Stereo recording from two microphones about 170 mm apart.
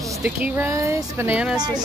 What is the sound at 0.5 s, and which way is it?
Speech, 15° right (ahead or behind).